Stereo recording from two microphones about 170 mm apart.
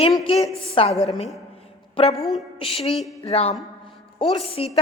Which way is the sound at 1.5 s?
35° left (ahead or behind).